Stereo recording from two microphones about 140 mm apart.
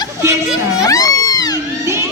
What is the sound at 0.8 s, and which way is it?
Cat, 25° left (ahead or behind).